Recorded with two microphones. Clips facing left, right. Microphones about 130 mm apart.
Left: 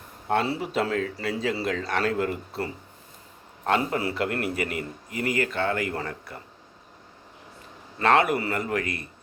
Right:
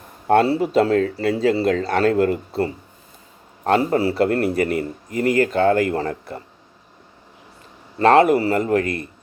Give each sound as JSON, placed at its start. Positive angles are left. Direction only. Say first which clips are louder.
{"t": 0.3, "sound": "a man's voice", "louder": "right 9 dB", "side_deg": -50}
{"t": 1.1, "sound": "speech", "louder": "right 9 dB", "side_deg": -55}
{"t": 1.6, "sound": "a man's voice", "louder": "right 8 dB", "side_deg": -40}
{"t": 3.7, "sound": "a man's voice", "louder": "right 7 dB", "side_deg": -35}
{"t": 7.9, "sound": "a man's voice", "louder": "right 8 dB", "side_deg": -35}